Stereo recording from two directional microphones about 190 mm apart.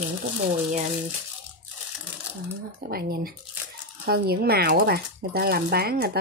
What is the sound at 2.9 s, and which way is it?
Speech, 55° right (ahead or behind).